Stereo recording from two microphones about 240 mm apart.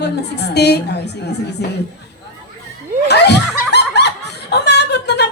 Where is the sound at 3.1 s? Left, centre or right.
Left.